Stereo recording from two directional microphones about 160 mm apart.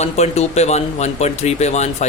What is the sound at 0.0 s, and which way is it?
Speech, 40° left (ahead or behind).